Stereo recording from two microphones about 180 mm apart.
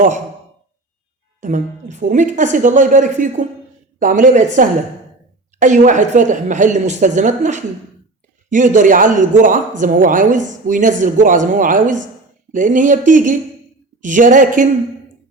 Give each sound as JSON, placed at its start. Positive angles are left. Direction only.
{"t": 1.4, "sound": "speech", "side_deg": -45}